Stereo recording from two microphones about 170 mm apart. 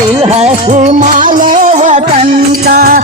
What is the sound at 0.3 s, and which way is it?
Music, 45° right (ahead or behind).